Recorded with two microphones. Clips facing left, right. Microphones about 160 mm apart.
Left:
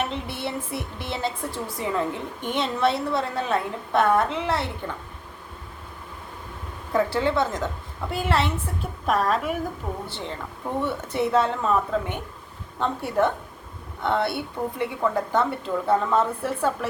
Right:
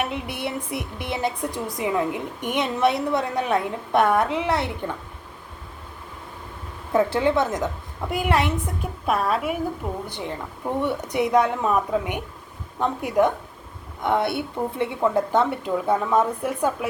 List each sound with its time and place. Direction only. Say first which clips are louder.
0.0 s a woman's voice: right 1 dB; 15° right (ahead or behind)
6.9 s a woman's voice: right 3 dB; 20° right (ahead or behind)